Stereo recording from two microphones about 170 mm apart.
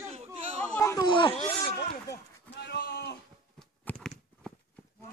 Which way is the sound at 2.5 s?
70° left (ahead or behind).